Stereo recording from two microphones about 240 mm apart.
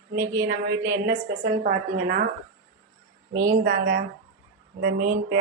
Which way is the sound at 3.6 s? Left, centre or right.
Right.